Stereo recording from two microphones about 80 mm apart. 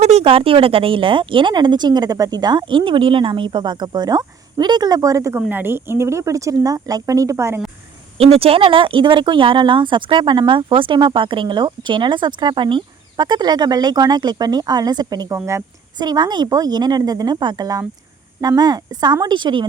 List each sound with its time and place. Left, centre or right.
0.5 s speech: right
5.5 s speech: right
8.6 s a woman's voice: right
18.3 s a woman's voice: right